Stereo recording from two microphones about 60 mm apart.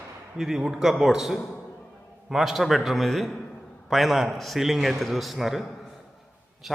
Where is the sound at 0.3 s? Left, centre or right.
Centre.